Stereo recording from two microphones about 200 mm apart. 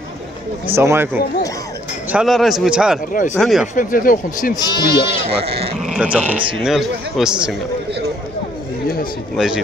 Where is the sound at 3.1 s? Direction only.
40° left (ahead or behind).